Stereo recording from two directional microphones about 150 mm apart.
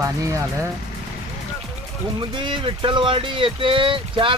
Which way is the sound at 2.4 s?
35° right (ahead or behind).